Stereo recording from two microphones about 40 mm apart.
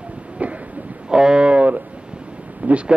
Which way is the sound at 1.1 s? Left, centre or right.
Right.